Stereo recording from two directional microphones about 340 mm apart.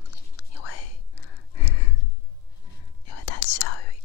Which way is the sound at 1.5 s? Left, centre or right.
Left.